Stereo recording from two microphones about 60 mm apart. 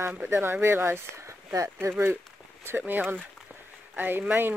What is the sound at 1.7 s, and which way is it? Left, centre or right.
Speech, right.